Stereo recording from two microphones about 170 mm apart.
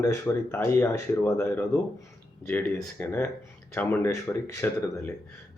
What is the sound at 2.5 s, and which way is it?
Speech, 5° left (ahead or behind).